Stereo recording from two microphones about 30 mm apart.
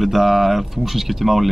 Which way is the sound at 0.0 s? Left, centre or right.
Centre.